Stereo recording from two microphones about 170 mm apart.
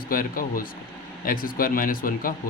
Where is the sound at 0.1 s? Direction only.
55° left (ahead or behind).